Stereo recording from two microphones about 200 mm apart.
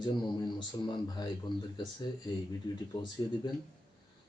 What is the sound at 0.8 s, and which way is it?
Speech, 20° left (ahead or behind).